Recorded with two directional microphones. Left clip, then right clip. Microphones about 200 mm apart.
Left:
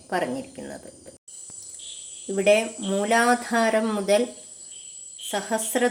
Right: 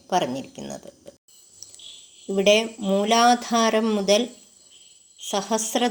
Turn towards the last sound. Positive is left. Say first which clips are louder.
# right 1 dB
turn(degrees=-30)  # may be behind; listen again after turning